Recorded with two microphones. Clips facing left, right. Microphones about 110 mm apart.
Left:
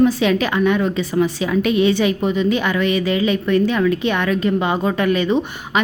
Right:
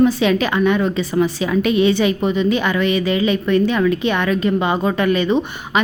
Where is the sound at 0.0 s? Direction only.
25° right (ahead or behind).